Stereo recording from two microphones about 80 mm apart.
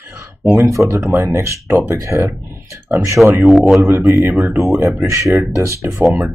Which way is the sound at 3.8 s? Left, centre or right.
Right.